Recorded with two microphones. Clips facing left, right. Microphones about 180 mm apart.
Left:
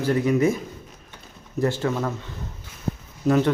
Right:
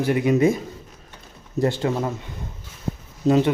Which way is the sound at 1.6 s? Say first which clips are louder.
Right 1 dB; 20° right (ahead or behind).